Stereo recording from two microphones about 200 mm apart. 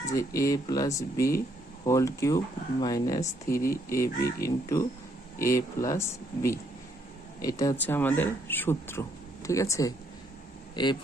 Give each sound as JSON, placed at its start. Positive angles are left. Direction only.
{"t": 0.0, "sound": "speech", "side_deg": 15}